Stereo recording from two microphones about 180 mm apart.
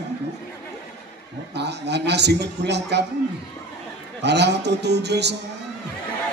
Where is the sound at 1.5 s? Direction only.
70° right (ahead or behind).